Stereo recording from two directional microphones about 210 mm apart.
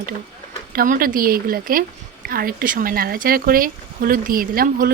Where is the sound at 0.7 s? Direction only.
45° right (ahead or behind).